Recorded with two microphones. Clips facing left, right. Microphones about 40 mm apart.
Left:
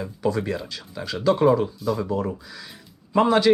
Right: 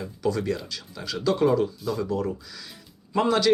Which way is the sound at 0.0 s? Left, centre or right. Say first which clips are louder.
Left 2 dB; centre.